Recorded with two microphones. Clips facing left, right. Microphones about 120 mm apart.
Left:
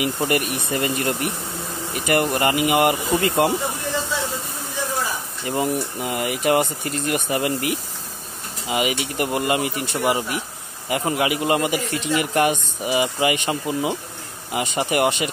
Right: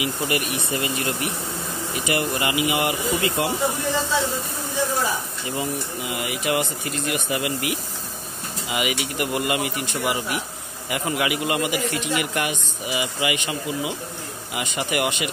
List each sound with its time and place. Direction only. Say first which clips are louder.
0.0 s speech: left 3 dB; 45° left (ahead or behind)
5.5 s a man's voice: left 5 dB; 45° left (ahead or behind)